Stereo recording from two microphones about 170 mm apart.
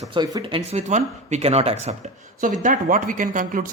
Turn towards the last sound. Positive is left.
turn(degrees=-50)  # may be behind; listen again after turning